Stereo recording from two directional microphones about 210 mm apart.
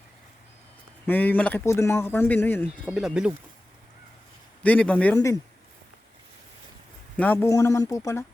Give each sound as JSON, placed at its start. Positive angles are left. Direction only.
{"t": 1.0, "sound": "speech", "side_deg": 10}
{"t": 2.9, "sound": "speech", "side_deg": -5}
{"t": 4.6, "sound": "speech", "side_deg": 5}
{"t": 7.2, "sound": "speech", "side_deg": 10}